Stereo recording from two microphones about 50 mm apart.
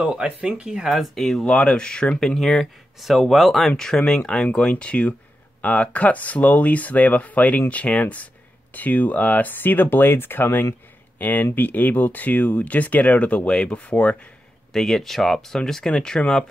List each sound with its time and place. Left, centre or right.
0.0 s speech: right
0.9 s speech: centre
1.4 s speech: left
14.7 s speech: centre